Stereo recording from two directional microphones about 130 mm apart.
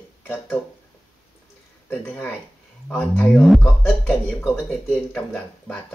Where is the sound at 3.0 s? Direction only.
15° left (ahead or behind).